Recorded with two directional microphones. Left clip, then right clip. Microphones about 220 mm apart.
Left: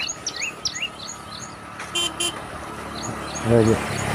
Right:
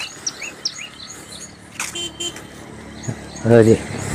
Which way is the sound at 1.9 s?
40° left (ahead or behind).